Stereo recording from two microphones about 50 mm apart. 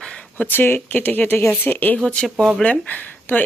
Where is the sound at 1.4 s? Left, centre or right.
Left.